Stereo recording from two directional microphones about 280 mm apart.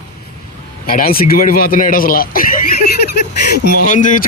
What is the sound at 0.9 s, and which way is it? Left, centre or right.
Speech, left.